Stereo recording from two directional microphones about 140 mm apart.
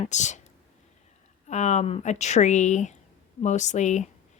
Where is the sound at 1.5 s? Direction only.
55° left (ahead or behind).